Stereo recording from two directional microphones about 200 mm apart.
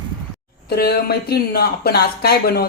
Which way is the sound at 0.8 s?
50° left (ahead or behind).